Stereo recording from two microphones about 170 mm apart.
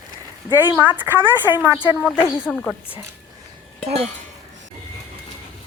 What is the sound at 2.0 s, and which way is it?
Speech, 10° left (ahead or behind).